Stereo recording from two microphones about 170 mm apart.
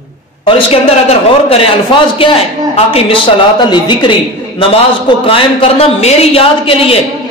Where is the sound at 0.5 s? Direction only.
35° left (ahead or behind).